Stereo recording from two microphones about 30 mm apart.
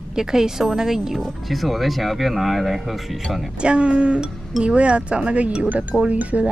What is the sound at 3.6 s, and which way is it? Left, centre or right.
Speech, right.